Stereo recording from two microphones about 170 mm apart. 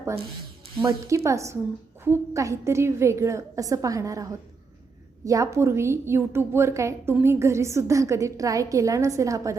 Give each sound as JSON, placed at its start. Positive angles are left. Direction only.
{"t": 0.8, "sound": "a woman's voice", "side_deg": -20}